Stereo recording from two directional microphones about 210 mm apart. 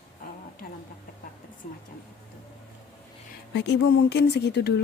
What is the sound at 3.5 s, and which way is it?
Speech, 55° left (ahead or behind).